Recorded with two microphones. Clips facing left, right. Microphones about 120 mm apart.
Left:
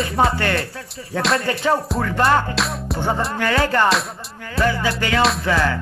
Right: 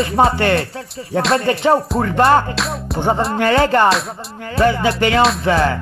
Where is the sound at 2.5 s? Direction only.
Centre (ahead or behind).